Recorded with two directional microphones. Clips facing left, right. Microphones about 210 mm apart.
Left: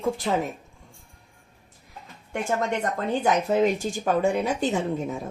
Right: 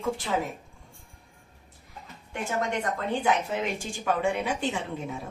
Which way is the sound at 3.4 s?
40° left (ahead or behind).